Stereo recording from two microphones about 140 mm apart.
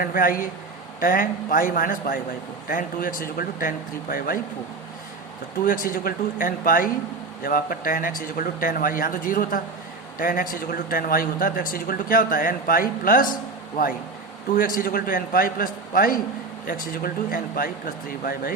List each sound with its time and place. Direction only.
0.0 s speech: 90° left
5.6 s speech: 80° left
14.5 s speech: 85° left